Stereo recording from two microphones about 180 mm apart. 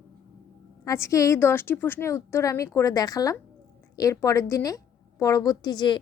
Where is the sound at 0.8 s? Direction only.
15° left (ahead or behind).